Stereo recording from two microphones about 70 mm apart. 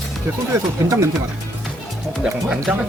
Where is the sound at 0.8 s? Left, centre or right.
Right.